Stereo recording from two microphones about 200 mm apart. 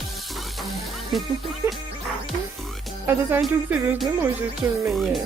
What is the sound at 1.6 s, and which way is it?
Music, 10° right (ahead or behind).